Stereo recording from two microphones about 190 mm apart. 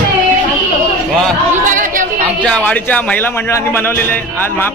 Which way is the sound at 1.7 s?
45° right (ahead or behind).